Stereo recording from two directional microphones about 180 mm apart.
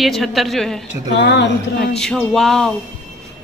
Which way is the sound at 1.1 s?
75° left (ahead or behind).